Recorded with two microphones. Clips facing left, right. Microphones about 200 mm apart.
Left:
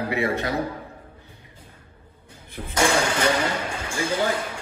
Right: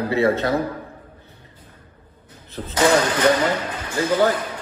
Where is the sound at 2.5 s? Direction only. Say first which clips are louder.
Right 5 dB; 10° left (ahead or behind).